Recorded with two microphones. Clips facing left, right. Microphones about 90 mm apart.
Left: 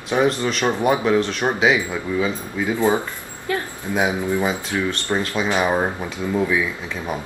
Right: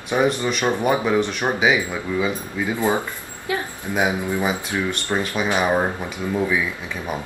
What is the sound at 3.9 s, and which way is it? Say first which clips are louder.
Speech: left 1 dB; 15° right (ahead or behind).